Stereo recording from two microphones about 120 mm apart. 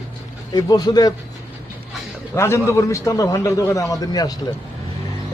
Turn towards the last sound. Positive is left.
turn(degrees=30)  # may be behind; listen again after turning